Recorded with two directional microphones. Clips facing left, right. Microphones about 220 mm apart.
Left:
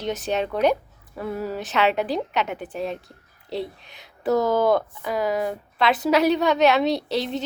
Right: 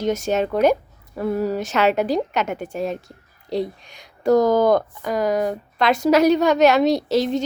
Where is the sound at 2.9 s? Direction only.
45° right (ahead or behind).